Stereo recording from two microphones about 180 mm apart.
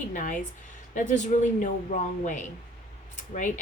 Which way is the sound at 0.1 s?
45° left (ahead or behind).